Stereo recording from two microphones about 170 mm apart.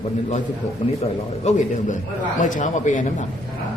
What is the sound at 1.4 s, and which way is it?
A man's voice, 45° left (ahead or behind).